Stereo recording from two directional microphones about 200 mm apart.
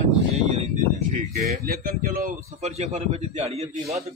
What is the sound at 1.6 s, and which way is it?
A man's voice, 50° right (ahead or behind).